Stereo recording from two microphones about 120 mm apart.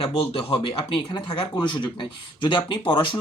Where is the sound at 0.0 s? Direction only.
50° left (ahead or behind).